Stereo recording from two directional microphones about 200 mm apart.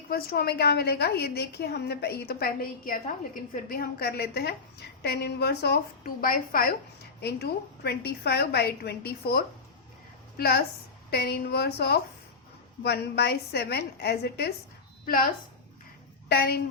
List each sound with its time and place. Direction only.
0.1 s a woman's voice: 50° left (ahead or behind)
16.3 s a woman's voice: 50° left (ahead or behind)